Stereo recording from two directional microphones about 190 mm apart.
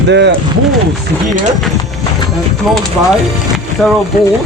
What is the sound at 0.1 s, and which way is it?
Speech, 65° right (ahead or behind).